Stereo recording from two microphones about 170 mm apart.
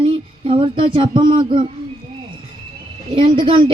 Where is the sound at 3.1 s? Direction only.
30° right (ahead or behind).